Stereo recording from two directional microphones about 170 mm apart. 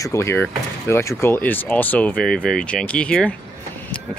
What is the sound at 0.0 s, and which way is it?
Speech, 15° left (ahead or behind).